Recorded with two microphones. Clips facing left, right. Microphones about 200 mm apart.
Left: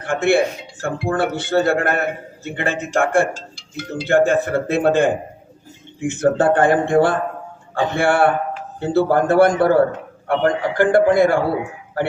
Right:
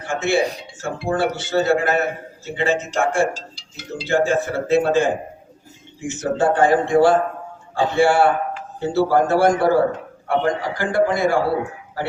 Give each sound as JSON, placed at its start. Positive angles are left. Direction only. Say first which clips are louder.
{"t": 0.0, "sound": "a man's voice", "louder": "left 3 dB", "side_deg": 55}